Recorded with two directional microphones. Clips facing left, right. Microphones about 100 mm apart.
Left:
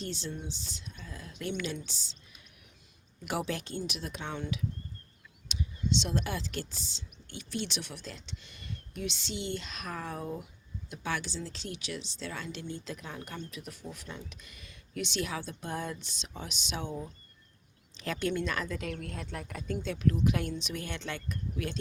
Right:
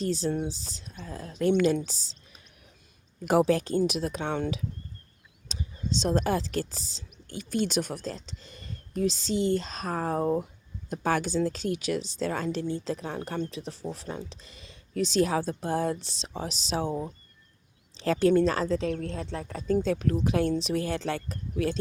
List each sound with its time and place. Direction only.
0.0 s speech: 40° right (ahead or behind)
5.5 s speech: 40° right (ahead or behind)